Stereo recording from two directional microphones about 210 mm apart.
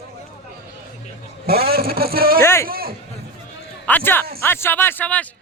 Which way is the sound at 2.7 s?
45° right (ahead or behind).